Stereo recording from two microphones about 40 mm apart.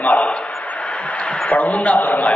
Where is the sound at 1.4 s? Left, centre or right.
Left.